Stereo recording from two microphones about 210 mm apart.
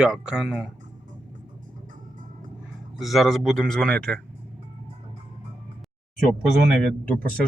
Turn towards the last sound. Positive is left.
turn(degrees=5)  # may be behind; listen again after turning